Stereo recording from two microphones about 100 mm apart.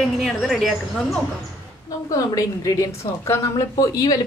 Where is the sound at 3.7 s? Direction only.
35° left (ahead or behind).